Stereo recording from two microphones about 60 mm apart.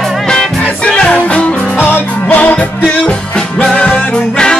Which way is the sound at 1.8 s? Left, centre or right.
Left.